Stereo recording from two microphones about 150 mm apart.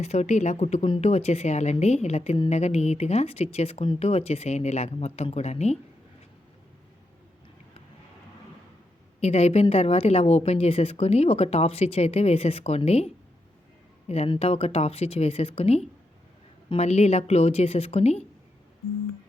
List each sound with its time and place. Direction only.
0.0 s a woman's voice: 45° left (ahead or behind)
9.2 s a woman's voice: 45° left (ahead or behind)
14.1 s a woman's voice: 45° left (ahead or behind)